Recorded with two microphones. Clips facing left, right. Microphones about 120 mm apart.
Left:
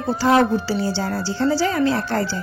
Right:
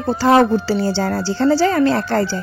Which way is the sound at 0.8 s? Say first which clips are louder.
Right 4 dB; 65° right (ahead or behind).